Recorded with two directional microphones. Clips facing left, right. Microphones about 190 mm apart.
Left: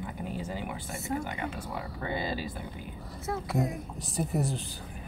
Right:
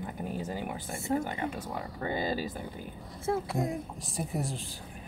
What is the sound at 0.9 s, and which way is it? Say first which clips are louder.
Speech: right 4 dB; 30° right (ahead or behind).